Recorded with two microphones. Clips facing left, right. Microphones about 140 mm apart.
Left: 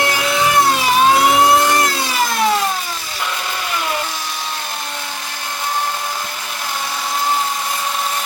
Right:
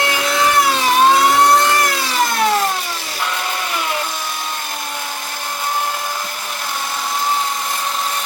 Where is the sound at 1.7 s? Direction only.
25° left (ahead or behind).